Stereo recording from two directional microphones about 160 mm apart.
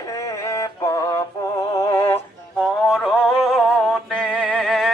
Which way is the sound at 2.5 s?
Centre (ahead or behind).